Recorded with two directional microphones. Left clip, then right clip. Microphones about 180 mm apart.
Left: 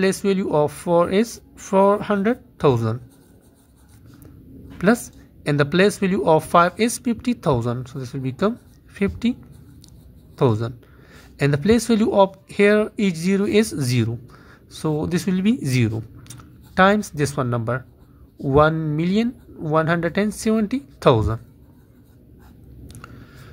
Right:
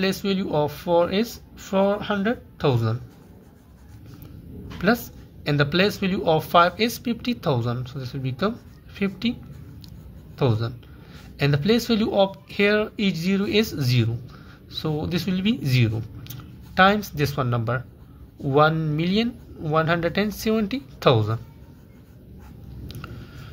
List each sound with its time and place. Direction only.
0.0 s speech: 45° left (ahead or behind)
4.7 s speech: 45° left (ahead or behind)